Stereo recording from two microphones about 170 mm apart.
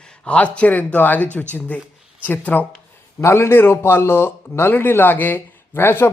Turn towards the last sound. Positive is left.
turn(degrees=15)  # may be behind; listen again after turning